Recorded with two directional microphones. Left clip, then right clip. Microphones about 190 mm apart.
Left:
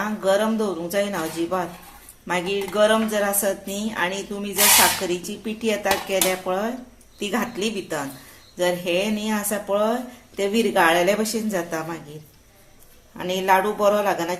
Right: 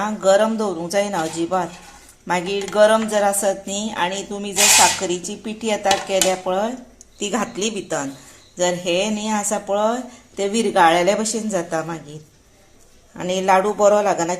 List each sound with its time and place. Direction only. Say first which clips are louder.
0.0 s speech: right 5 dB; 25° right (ahead or behind)
13.1 s speech: right 3 dB; 25° right (ahead or behind)